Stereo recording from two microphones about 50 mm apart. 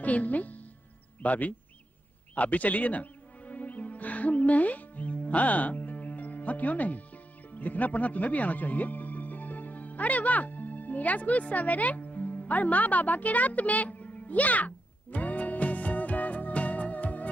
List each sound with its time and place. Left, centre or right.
0.0 s speech: left
2.3 s music: left